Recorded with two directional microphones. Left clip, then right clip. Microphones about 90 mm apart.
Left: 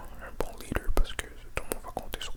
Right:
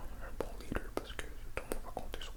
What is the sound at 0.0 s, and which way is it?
Whispering, 25° left (ahead or behind).